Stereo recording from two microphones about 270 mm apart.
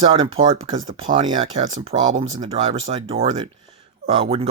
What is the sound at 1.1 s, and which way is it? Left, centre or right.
Speech, centre.